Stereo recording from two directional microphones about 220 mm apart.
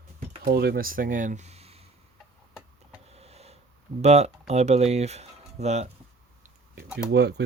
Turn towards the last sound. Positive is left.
turn(degrees=-50)  # may be behind; listen again after turning